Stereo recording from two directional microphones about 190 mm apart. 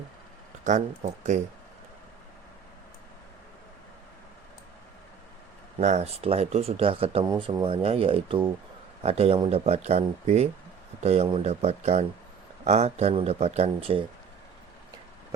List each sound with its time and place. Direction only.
0.6 s speech: 40° right (ahead or behind)
5.8 s speech: 35° right (ahead or behind)